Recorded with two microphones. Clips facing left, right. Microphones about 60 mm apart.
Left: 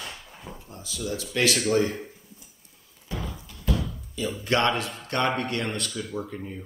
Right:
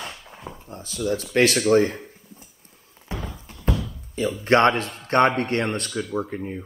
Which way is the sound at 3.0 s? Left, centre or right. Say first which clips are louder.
Right 5 dB; right.